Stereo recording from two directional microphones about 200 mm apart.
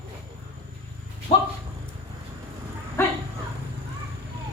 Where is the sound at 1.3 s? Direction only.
30° left (ahead or behind).